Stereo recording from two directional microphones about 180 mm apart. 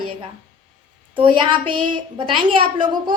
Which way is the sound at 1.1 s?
30° right (ahead or behind).